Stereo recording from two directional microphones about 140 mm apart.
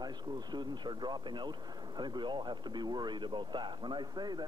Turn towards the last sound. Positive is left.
turn(degrees=-30)  # may be behind; listen again after turning